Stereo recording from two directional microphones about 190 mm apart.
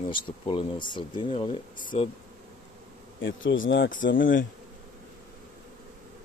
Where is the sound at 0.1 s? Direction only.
25° left (ahead or behind).